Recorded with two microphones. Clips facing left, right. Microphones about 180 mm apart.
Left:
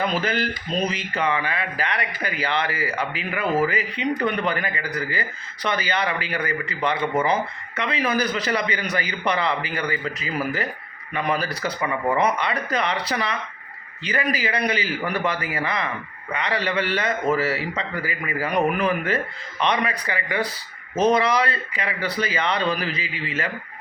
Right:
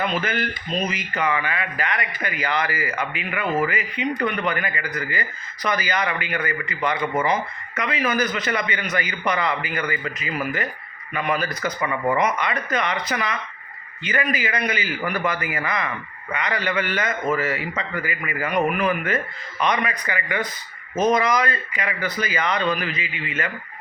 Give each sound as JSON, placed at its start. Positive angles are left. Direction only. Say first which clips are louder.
{"t": 0.0, "sound": "a man's voice", "louder": "left 1 dB", "side_deg": 35}